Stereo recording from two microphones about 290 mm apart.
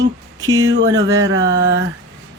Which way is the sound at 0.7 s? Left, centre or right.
Right.